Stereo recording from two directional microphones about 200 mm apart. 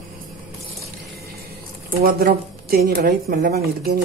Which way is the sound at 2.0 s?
45° right (ahead or behind).